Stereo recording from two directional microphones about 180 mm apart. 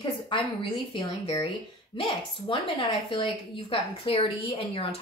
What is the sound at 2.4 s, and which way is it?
A woman's voice, 25° left (ahead or behind).